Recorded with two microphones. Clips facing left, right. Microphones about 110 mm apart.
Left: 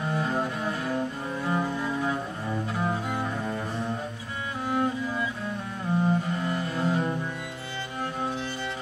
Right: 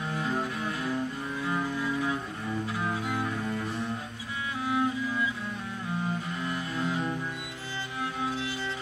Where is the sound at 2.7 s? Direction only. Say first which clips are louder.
Left 3 dB; 40° left (ahead or behind).